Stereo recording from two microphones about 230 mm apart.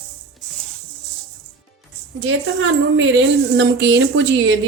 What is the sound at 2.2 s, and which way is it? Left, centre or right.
Speech, right.